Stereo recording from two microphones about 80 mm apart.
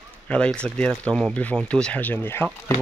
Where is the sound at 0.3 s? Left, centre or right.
Centre.